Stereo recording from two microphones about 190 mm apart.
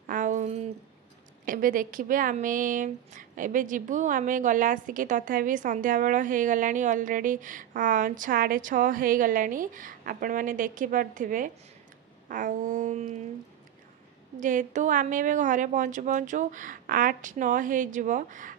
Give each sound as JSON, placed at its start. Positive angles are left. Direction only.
{"t": 0.0, "sound": "a sound", "side_deg": -45}
{"t": 1.4, "sound": "speech", "side_deg": -45}
{"t": 14.4, "sound": "speech", "side_deg": -40}